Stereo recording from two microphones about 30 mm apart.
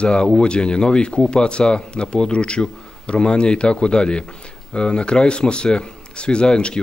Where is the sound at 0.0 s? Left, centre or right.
Left.